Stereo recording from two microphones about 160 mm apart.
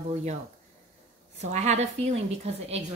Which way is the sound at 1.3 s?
45° right (ahead or behind).